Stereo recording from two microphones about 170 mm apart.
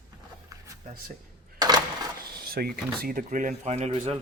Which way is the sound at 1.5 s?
25° right (ahead or behind).